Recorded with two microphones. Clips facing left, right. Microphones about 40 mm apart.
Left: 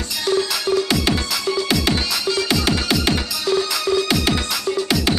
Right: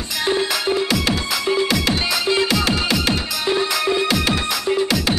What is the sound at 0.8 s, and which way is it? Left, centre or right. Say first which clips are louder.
Music: even; centre.